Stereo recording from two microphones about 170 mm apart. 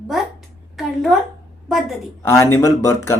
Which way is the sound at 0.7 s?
Centre (ahead or behind).